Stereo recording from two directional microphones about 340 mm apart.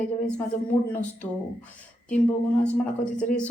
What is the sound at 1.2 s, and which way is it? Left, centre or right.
Speech, centre.